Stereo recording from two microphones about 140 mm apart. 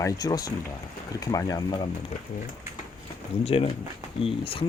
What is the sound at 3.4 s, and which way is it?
Speech, 45° left (ahead or behind).